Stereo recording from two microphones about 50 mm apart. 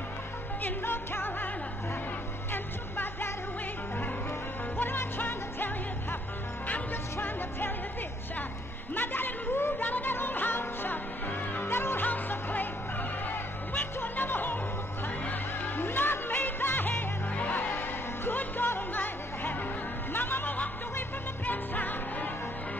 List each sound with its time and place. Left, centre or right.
0.6 s music: left
2.5 s music: left
4.7 s music: left
6.7 s music: left
8.9 s speech: left
11.6 s music: left
12.0 s music: left
15.8 s music: left